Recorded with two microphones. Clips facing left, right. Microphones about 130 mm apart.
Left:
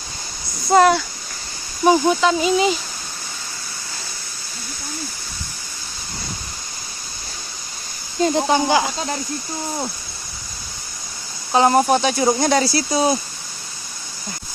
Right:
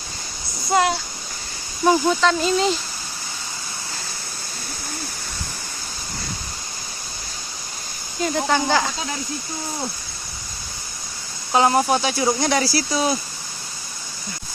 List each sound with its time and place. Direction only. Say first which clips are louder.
0.7 s speech: left 6 dB; 45° left (ahead or behind)
1.8 s speech: left 2 dB; 10° left (ahead or behind)
8.2 s speech: left 4 dB; 20° left (ahead or behind)
11.5 s speech: left 2 dB; 35° left (ahead or behind)
11.8 s speech: left 3 dB; 25° left (ahead or behind)